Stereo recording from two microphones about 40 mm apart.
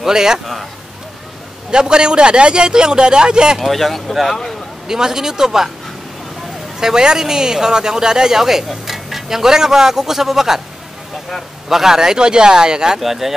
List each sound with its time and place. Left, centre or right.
0.0 s speech: centre
1.7 s a man's voice: right
3.5 s speech: centre
4.8 s speech: centre
6.8 s speech: centre
11.7 s a man's voice: centre
13.0 s speech: centre